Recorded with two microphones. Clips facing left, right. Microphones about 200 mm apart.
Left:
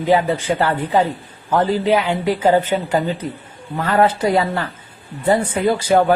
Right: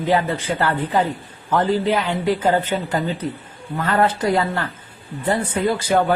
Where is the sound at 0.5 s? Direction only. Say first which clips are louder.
Even; 10° left (ahead or behind).